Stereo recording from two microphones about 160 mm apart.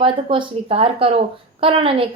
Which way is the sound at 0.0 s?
35° right (ahead or behind).